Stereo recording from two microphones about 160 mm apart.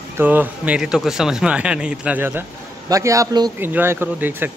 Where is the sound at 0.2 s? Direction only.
10° right (ahead or behind).